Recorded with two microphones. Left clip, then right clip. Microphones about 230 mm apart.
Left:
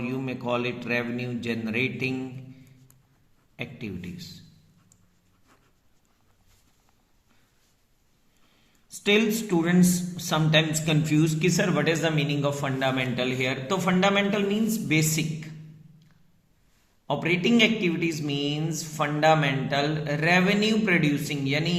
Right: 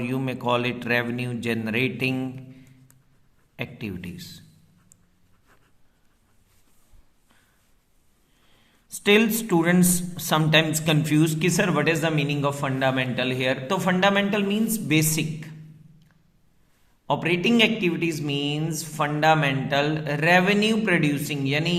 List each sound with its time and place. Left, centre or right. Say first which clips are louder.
0.0 s a man's voice: right 4 dB; right
8.9 s speech: right 3 dB; right
17.1 s speech: right 2 dB; right